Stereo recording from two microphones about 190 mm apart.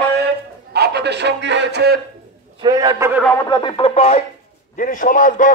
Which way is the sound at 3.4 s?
25° left (ahead or behind).